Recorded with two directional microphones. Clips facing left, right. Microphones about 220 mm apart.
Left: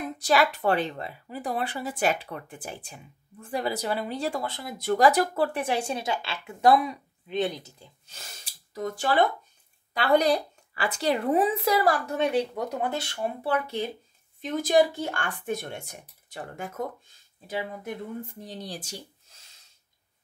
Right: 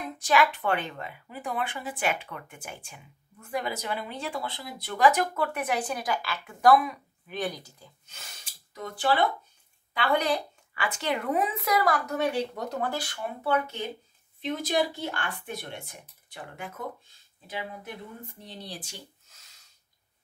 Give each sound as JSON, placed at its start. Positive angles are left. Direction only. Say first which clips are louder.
{"t": 0.2, "sound": "a woman's voice", "louder": "left 1 dB", "side_deg": 35}
{"t": 8.7, "sound": "a woman's voice", "louder": "left 2 dB", "side_deg": 40}
{"t": 12.5, "sound": "speech", "louder": "left 2 dB", "side_deg": 15}
{"t": 14.4, "sound": "speech", "louder": "left 5 dB", "side_deg": 45}